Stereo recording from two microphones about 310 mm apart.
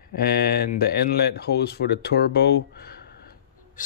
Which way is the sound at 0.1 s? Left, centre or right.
Left.